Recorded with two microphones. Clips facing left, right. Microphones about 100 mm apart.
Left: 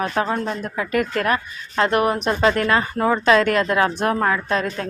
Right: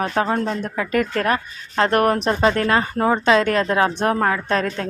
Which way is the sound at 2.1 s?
35° right (ahead or behind).